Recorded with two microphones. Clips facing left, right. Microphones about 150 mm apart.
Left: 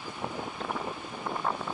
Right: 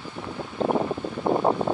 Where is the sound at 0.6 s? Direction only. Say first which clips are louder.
Right 16 dB; 50° right (ahead or behind).